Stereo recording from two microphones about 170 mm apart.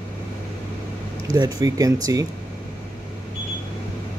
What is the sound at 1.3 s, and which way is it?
Speech, 20° right (ahead or behind).